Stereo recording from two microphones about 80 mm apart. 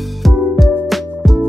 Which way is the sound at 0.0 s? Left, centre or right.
Centre.